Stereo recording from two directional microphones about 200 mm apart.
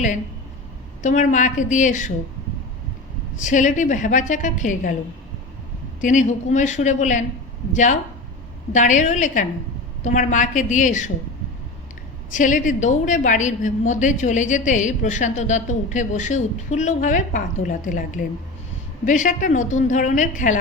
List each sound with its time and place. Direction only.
1.0 s a woman's voice: 40° left (ahead or behind)
3.3 s a woman's voice: 40° left (ahead or behind)
6.0 s a woman's voice: 40° left (ahead or behind)
8.7 s a woman's voice: 40° left (ahead or behind)
12.3 s a woman's voice: 40° left (ahead or behind)